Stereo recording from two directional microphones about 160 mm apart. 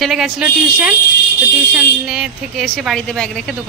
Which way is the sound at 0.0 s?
Centre (ahead or behind).